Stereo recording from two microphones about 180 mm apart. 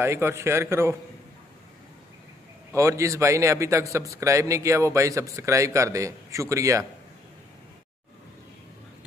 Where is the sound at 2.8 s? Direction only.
15° right (ahead or behind).